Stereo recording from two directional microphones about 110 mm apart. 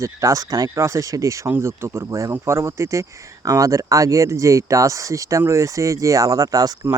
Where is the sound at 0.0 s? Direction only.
30° right (ahead or behind).